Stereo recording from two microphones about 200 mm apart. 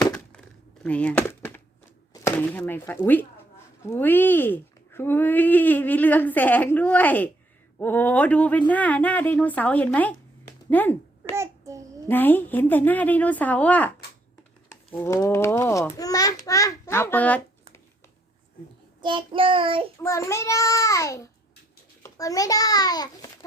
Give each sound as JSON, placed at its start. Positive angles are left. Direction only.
{"t": 0.8, "sound": "a sound", "side_deg": 5}
{"t": 2.2, "sound": "speech", "side_deg": 10}
{"t": 10.7, "sound": "a sound", "side_deg": 10}
{"t": 11.3, "sound": "child singing", "side_deg": -15}
{"t": 12.0, "sound": "speech", "side_deg": 10}
{"t": 14.9, "sound": "speech", "side_deg": 15}
{"t": 19.0, "sound": "child singing", "side_deg": -25}
{"t": 20.0, "sound": "a child's voice", "side_deg": 15}